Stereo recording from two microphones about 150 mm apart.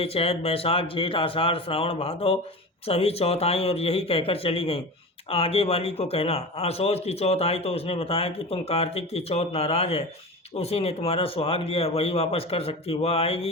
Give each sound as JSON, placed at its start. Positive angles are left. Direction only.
{"t": 0.0, "sound": "a man's voice", "side_deg": 40}